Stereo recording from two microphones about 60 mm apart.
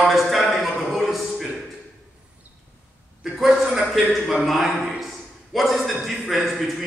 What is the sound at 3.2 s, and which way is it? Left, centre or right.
A man's voice, centre.